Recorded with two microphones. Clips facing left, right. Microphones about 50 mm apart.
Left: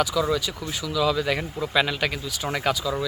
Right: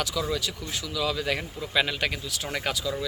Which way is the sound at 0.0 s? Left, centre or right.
Centre.